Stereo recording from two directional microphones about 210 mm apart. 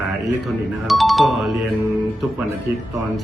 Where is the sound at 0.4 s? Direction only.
Centre (ahead or behind).